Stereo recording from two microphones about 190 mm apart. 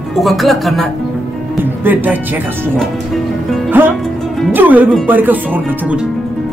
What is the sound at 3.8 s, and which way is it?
Speech, 10° right (ahead or behind).